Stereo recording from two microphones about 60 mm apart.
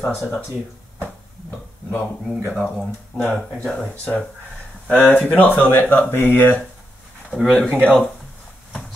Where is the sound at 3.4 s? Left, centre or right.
Centre.